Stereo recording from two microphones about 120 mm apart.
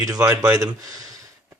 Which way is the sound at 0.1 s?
30° right (ahead or behind).